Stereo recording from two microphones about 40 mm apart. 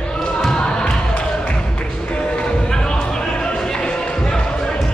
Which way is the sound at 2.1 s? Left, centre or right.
Left.